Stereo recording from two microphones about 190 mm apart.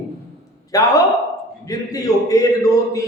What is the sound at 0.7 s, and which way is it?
A man's voice, 20° left (ahead or behind).